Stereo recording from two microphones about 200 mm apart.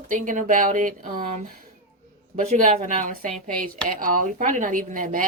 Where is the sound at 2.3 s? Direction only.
40° right (ahead or behind).